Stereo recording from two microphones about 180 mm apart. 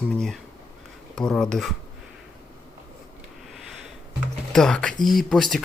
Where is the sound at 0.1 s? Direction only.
Centre (ahead or behind).